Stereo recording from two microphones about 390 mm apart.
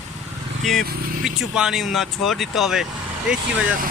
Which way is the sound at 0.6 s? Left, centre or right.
Centre.